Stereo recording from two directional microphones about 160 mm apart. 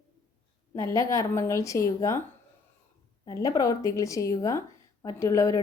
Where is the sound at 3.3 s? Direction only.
20° left (ahead or behind).